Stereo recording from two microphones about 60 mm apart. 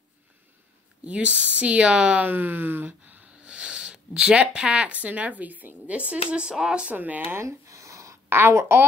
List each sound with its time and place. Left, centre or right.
1.0 s speech: right
3.4 s speech: centre
7.0 s a woman's voice: right
7.3 s a sound: right
8.3 s a woman's voice: right